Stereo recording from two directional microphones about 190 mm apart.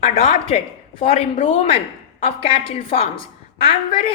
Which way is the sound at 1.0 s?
30° left (ahead or behind).